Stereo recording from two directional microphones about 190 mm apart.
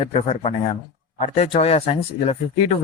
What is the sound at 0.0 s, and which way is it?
Speech, 30° left (ahead or behind).